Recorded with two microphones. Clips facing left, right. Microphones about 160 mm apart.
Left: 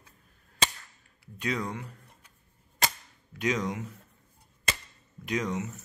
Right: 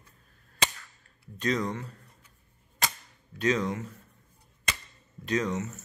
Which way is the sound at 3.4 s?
15° left (ahead or behind).